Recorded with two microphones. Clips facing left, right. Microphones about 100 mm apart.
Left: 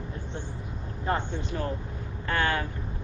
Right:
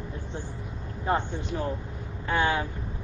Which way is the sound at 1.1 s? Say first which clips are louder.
Right 2 dB; 15° right (ahead or behind).